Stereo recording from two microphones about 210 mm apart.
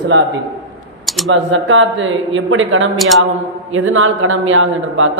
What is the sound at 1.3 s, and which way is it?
A man's voice, 65° right (ahead or behind).